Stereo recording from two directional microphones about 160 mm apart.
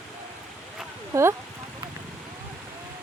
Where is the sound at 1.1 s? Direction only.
20° right (ahead or behind).